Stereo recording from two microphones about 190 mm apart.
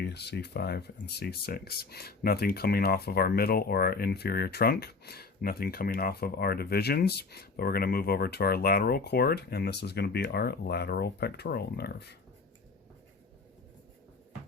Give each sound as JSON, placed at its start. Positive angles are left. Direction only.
{"t": 0.0, "sound": "speech", "side_deg": 60}